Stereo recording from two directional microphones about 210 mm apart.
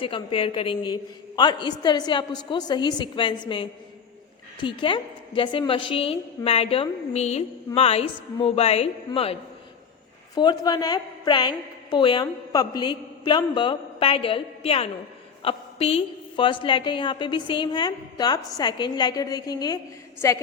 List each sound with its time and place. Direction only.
0.0 s a woman's voice: 25° left (ahead or behind)